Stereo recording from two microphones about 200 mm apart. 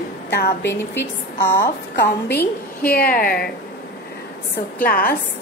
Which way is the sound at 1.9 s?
55° left (ahead or behind).